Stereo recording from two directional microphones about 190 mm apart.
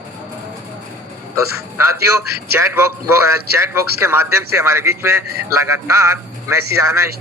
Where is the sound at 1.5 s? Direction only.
15° right (ahead or behind).